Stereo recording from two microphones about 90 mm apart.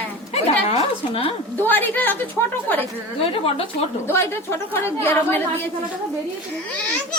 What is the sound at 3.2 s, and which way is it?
Speech, 90° left.